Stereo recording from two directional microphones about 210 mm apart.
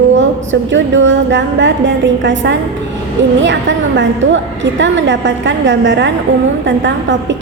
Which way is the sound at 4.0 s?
60° right (ahead or behind).